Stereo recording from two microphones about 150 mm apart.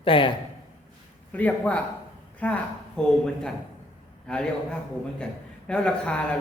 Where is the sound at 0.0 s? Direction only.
35° left (ahead or behind).